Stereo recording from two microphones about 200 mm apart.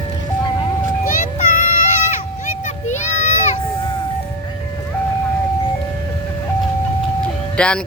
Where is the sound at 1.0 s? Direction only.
45° left (ahead or behind).